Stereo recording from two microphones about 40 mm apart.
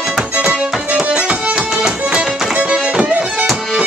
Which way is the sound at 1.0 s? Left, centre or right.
Right.